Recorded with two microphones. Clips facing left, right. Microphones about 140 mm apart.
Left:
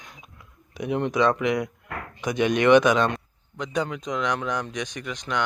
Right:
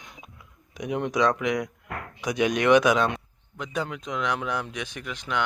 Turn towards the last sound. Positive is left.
turn(degrees=-5)  # may be behind; listen again after turning